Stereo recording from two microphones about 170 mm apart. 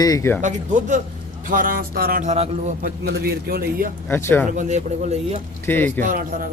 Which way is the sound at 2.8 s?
65° right (ahead or behind).